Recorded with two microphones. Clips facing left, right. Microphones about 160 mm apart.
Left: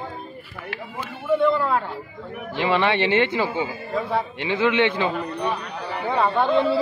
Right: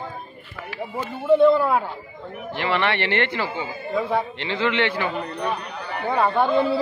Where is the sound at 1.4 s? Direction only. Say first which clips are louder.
Right 3 dB; 15° right (ahead or behind).